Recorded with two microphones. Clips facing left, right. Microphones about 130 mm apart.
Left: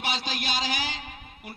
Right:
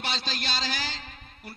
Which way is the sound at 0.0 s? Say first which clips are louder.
Left 2 dB; 10° left (ahead or behind).